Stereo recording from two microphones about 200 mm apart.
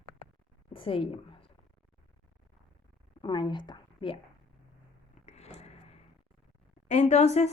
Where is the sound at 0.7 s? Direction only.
25° left (ahead or behind).